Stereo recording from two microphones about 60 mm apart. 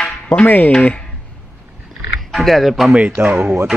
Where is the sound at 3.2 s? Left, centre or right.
Right.